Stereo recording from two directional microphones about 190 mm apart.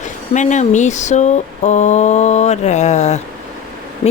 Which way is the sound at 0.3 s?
40° left (ahead or behind).